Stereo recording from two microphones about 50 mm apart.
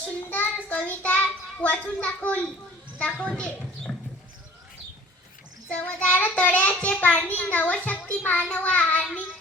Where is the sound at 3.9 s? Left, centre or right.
Centre.